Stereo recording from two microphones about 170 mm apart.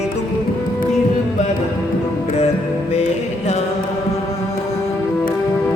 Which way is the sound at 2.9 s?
40° left (ahead or behind).